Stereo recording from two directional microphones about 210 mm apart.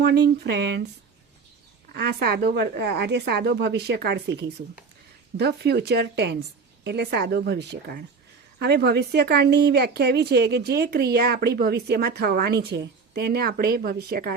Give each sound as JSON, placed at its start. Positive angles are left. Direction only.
{"t": 0.0, "sound": "speech", "side_deg": -50}
{"t": 1.9, "sound": "speech", "side_deg": -50}